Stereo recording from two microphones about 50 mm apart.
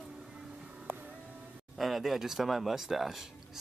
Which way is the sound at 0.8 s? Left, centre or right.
Right.